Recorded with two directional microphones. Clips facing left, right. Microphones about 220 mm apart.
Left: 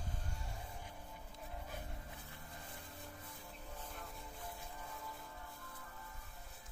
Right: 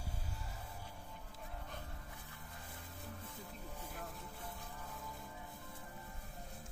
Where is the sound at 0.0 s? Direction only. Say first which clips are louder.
Even; 5° right (ahead or behind).